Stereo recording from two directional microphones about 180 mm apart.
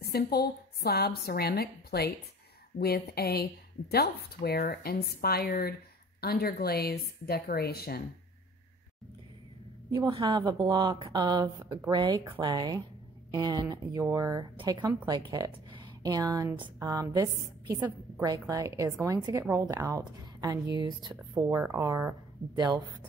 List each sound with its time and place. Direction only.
0.0 s a woman's voice: 60° left (ahead or behind)
9.8 s a woman's voice: 25° right (ahead or behind)